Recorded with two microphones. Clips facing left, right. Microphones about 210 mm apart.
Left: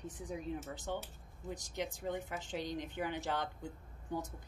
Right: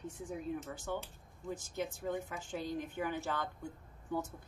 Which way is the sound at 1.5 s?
15° left (ahead or behind).